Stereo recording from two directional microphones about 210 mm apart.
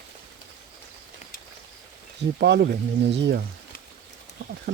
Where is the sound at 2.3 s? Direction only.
50° right (ahead or behind).